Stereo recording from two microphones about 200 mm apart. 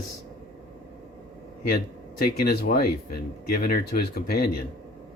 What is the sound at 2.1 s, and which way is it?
Speech, 50° left (ahead or behind).